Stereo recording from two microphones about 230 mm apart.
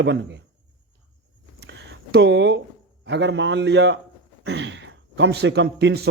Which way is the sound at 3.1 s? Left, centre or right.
Right.